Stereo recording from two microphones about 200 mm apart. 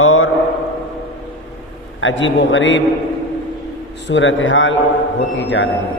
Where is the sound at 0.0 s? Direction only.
90° left.